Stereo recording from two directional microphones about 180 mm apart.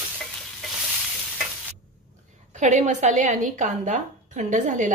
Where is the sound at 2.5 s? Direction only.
40° right (ahead or behind).